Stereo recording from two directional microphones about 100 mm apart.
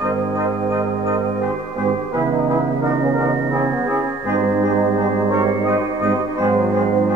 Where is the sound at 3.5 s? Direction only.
25° right (ahead or behind).